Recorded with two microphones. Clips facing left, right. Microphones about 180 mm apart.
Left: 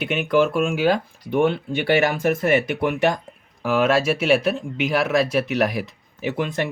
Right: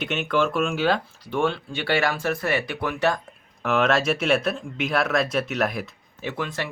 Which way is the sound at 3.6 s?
5° left (ahead or behind).